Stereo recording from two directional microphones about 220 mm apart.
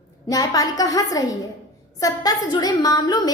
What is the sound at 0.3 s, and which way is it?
A woman's voice, 15° left (ahead or behind).